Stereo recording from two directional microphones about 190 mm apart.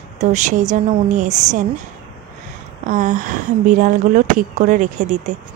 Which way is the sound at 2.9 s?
40° right (ahead or behind).